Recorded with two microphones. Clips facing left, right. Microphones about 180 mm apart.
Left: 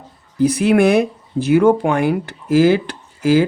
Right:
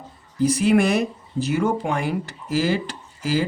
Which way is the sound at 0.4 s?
65° left (ahead or behind).